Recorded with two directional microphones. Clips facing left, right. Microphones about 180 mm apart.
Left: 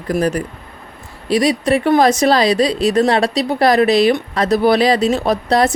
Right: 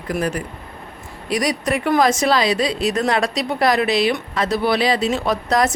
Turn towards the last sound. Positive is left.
turn(degrees=30)  # may be behind; listen again after turning